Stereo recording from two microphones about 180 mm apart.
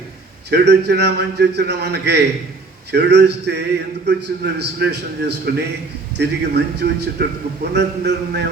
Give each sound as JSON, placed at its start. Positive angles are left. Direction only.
{"t": 0.5, "sound": "a man's voice", "side_deg": -70}